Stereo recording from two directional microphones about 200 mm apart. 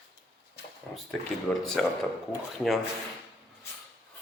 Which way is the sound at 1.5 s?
5° left (ahead or behind).